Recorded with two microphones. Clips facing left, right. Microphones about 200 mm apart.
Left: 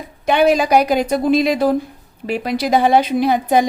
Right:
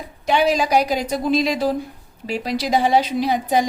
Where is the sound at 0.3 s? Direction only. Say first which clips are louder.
Left 4 dB; 55° left (ahead or behind).